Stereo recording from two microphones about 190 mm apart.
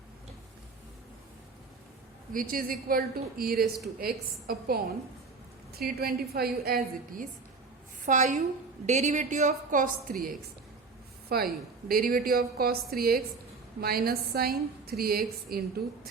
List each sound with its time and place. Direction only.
2.3 s a woman's voice: 45° right (ahead or behind)
11.3 s a woman's voice: 55° right (ahead or behind)